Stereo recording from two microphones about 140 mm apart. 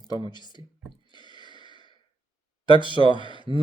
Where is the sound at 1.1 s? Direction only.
35° left (ahead or behind).